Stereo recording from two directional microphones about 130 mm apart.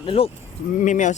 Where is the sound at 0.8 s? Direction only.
75° left (ahead or behind).